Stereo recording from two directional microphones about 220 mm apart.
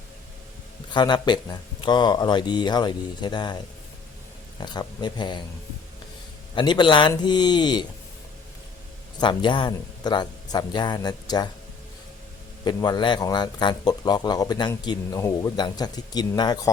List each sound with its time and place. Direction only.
0.9 s speech: 20° left (ahead or behind)
4.6 s speech: 20° left (ahead or behind)
6.6 s speech: 20° left (ahead or behind)
9.2 s speech: 20° left (ahead or behind)
12.6 s speech: 20° left (ahead or behind)